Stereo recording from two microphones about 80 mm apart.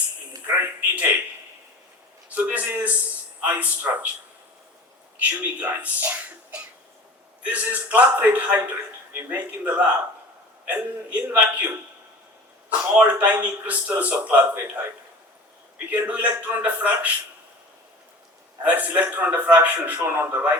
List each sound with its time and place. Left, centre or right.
0.4 s a sound: right
2.3 s a man's voice: centre
5.4 s speech: right
12.9 s speech: centre
15.9 s speech: centre
18.6 s speech: centre